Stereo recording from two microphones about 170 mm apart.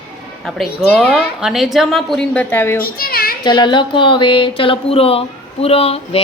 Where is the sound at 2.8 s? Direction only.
60° left (ahead or behind).